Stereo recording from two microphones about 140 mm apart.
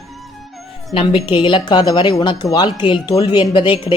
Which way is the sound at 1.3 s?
35° left (ahead or behind).